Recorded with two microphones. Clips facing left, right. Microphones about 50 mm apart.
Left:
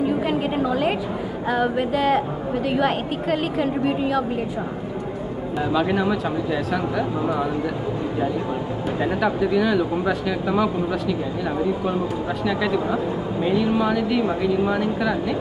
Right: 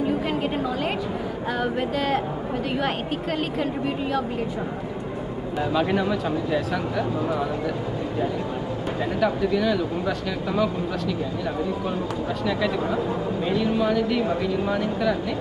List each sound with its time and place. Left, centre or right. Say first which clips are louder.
0.3 s a sound: left 3 dB; centre
1.5 s speech: left 4 dB; centre
5.6 s speech: left 2 dB; centre
9.0 s speech: left 2 dB; centre
12.4 s speech: left 2 dB; centre